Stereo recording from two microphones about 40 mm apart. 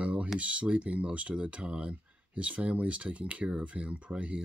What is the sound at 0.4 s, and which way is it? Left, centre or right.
Speech, right.